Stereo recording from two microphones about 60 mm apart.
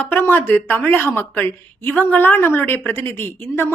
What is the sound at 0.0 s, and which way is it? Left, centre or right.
A woman's voice, left.